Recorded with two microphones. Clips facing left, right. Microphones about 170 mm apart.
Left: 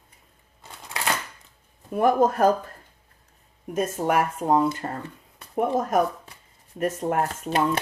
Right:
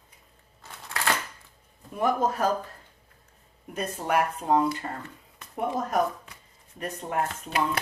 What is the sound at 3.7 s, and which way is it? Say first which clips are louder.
Speech: left 4 dB; 45° left (ahead or behind).